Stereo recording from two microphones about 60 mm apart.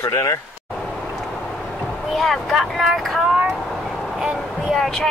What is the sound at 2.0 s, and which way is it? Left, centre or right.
Speech, centre.